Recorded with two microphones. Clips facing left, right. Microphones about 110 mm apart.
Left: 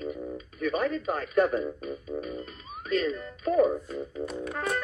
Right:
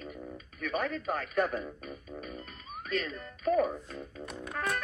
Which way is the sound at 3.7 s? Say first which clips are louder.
Left 8 dB; 15° left (ahead or behind).